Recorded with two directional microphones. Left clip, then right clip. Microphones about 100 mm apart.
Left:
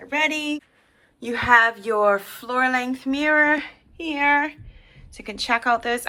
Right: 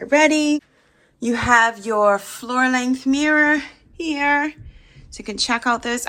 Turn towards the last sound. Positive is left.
turn(degrees=-35)  # may be behind; listen again after turning